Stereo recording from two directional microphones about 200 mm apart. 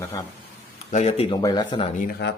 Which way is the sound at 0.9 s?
30° left (ahead or behind).